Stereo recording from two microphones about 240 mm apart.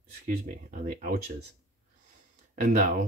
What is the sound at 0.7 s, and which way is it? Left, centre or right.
Speech, right.